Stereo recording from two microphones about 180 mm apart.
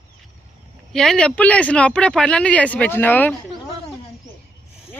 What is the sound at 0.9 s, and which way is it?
Speech, 5° left (ahead or behind).